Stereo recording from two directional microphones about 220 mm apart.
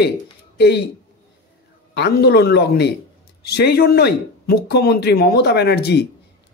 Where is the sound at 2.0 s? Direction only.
50° left (ahead or behind).